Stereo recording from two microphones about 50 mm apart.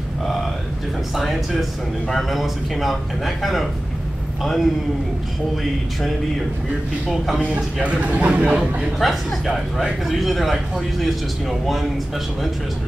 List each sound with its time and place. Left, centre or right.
1.1 s speech: centre
7.5 s a man's voice: right
8.9 s speech: centre